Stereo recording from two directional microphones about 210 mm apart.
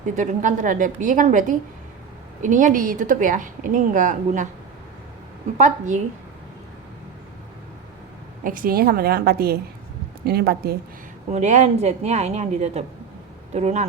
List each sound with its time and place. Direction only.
0.2 s a woman's voice: 35° right (ahead or behind)
5.5 s a woman's voice: 35° right (ahead or behind)
8.4 s a woman's voice: 40° right (ahead or behind)
11.3 s a woman's voice: 35° right (ahead or behind)